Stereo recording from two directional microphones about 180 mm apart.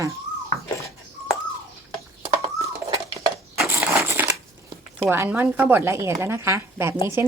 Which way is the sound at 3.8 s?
15° right (ahead or behind).